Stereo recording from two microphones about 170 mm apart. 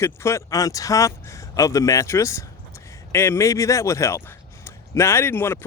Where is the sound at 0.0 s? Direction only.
15° left (ahead or behind).